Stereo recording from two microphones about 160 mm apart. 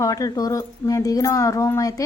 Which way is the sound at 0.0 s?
20° left (ahead or behind).